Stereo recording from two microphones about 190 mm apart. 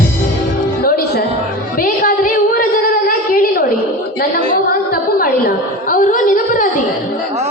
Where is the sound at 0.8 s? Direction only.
50° left (ahead or behind).